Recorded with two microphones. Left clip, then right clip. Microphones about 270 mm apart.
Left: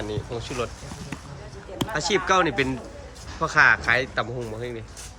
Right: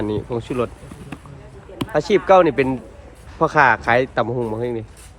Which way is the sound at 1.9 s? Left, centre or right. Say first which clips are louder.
Right 8 dB; centre.